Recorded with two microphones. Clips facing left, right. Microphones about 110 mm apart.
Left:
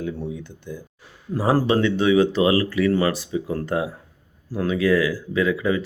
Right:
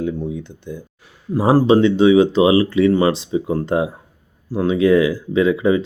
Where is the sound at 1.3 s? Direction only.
15° right (ahead or behind).